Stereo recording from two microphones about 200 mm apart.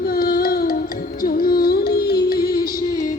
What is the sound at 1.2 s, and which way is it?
Music, 45° left (ahead or behind).